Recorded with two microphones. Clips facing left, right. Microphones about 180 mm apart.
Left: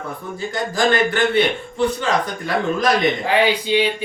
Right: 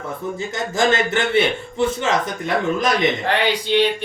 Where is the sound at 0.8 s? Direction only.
20° right (ahead or behind).